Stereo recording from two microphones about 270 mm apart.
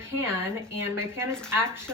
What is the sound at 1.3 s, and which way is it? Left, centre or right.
Speech, centre.